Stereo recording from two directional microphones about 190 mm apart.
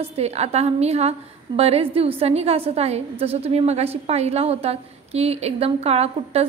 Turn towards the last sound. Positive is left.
turn(degrees=-35)  # may be behind; listen again after turning